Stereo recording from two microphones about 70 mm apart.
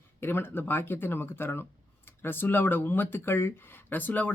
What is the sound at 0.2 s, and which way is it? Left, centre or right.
Speech, left.